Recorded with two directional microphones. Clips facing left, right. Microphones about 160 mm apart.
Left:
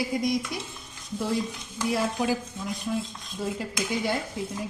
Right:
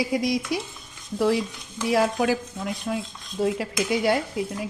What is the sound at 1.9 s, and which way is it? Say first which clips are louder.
A woman's voice: right 5 dB; 80° right.